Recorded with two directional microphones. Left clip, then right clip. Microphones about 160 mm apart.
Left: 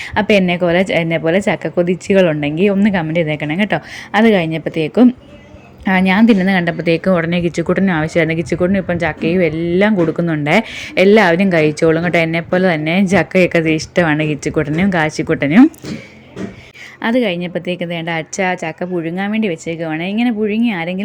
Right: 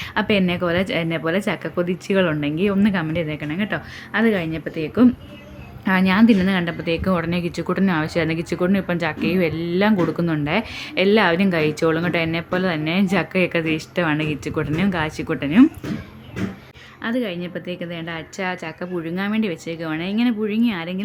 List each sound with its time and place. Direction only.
0.0 s a woman's voice: 25° left (ahead or behind)
5.8 s a woman's voice: 25° left (ahead or behind)
10.4 s a woman's voice: 25° left (ahead or behind)
17.0 s a woman's voice: 35° left (ahead or behind)